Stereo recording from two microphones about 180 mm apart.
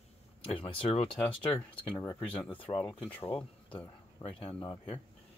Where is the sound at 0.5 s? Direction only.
30° left (ahead or behind).